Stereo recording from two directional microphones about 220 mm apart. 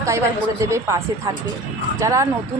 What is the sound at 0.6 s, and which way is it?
A woman's voice, 15° right (ahead or behind).